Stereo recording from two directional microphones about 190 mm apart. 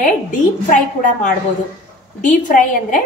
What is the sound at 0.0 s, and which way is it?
A woman's voice, 45° left (ahead or behind).